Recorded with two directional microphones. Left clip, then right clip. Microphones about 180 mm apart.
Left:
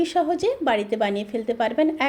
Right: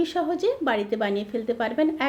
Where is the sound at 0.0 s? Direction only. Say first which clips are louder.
Left 3 dB; 20° left (ahead or behind).